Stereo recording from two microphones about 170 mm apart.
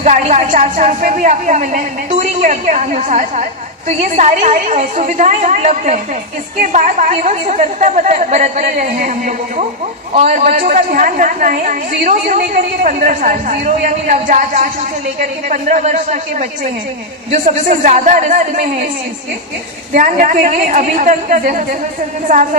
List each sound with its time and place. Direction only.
0.0 s a woman's voice: 45° right (ahead or behind)
19.9 s a woman's voice: 50° right (ahead or behind)